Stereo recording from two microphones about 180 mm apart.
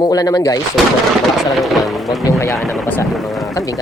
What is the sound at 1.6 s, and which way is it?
Speech, centre (ahead or behind).